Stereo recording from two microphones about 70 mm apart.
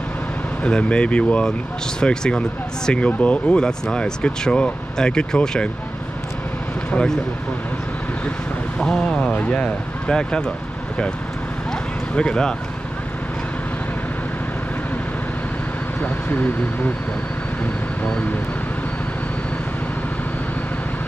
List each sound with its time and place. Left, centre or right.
0.7 s speech: centre
6.9 s speech: centre
8.7 s speech: centre
12.2 s speech: centre
16.0 s speech: left